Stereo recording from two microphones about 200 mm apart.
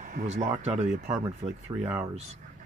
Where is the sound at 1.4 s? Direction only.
10° right (ahead or behind).